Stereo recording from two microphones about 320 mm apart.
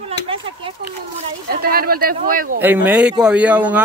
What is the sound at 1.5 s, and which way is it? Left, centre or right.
A woman's voice, right.